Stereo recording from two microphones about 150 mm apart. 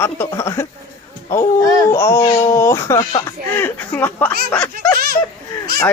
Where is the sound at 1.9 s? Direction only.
15° left (ahead or behind).